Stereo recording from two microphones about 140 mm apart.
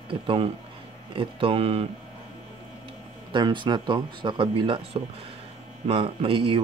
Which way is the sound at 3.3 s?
35° right (ahead or behind).